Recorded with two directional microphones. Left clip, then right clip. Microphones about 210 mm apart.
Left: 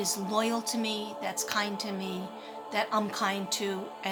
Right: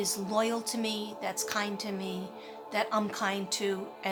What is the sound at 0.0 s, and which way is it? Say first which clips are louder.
A woman's voice: even; 5° right (ahead or behind).